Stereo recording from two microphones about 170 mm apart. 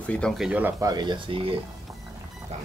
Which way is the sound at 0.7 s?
20° right (ahead or behind).